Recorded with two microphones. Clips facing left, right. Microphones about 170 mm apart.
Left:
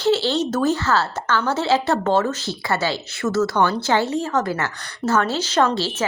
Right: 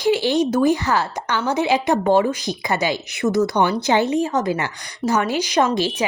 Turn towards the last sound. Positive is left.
turn(degrees=-15)  # may be behind; listen again after turning